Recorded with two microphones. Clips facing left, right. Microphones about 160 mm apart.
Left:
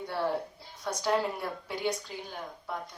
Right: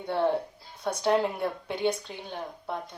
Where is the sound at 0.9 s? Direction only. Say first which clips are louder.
Right 4 dB; 25° right (ahead or behind).